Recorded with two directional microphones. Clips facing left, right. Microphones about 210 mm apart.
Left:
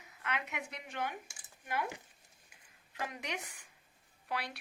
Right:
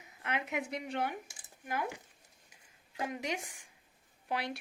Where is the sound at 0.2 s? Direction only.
30° right (ahead or behind).